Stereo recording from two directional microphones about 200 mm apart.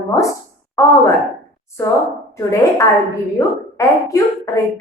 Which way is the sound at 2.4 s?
15° left (ahead or behind).